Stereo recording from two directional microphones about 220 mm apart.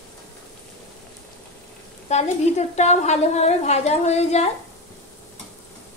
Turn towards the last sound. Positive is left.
turn(degrees=30)  # may be behind; listen again after turning